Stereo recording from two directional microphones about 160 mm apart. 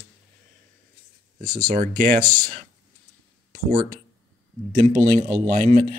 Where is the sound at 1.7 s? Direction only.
50° right (ahead or behind).